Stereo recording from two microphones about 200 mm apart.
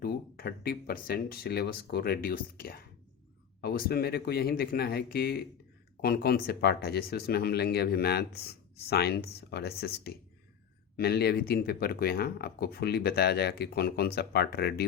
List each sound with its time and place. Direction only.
0.0 s speech: 50° left (ahead or behind)